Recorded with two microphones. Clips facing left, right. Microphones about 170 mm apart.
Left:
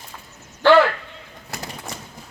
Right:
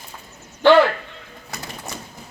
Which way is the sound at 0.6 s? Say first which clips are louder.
Right 1 dB; 15° right (ahead or behind).